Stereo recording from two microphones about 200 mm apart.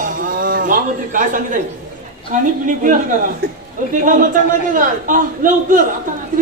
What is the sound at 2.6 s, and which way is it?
Speech, 40° right (ahead or behind).